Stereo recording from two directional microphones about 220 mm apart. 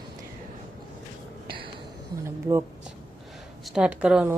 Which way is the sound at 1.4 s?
25° right (ahead or behind).